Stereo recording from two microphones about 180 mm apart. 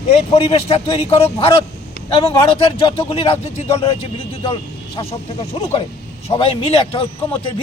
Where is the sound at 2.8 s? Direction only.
30° left (ahead or behind).